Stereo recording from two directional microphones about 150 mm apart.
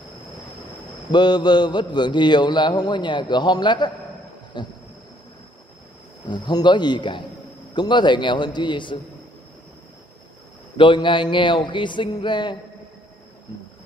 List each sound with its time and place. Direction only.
1.1 s a man's voice: 30° left (ahead or behind)
6.2 s a man's voice: 30° left (ahead or behind)
10.8 s speech: 35° left (ahead or behind)